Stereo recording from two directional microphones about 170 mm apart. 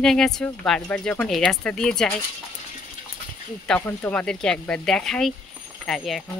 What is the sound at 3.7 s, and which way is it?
Speech, 10° left (ahead or behind).